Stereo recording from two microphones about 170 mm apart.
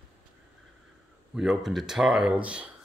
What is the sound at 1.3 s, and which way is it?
Speech, centre (ahead or behind).